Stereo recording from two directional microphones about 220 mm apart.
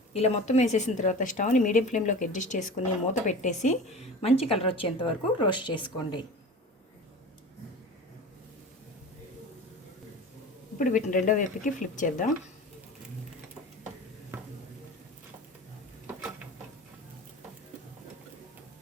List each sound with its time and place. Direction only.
0.1 s a woman's voice: 30° left (ahead or behind)
10.8 s speech: 35° left (ahead or behind)
14.3 s stir: 10° right (ahead or behind)